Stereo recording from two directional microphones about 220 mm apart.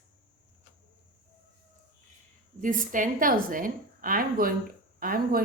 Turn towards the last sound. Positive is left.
turn(degrees=-40)  # may be behind; listen again after turning